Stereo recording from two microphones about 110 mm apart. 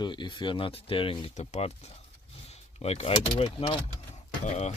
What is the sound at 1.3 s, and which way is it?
Speech, 90° left.